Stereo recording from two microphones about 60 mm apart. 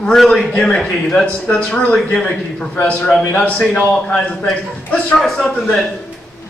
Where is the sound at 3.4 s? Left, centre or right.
Centre.